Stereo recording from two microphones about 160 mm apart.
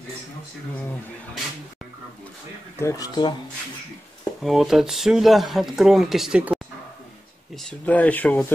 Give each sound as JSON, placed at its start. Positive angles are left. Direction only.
{"t": 2.8, "sound": "speech", "side_deg": 20}
{"t": 4.4, "sound": "speech", "side_deg": 0}
{"t": 7.5, "sound": "speech", "side_deg": 10}